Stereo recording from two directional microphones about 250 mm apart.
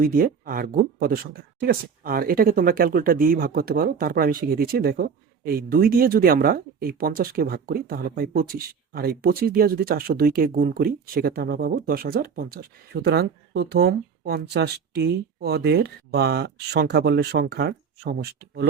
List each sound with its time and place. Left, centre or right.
0.0 s speech: right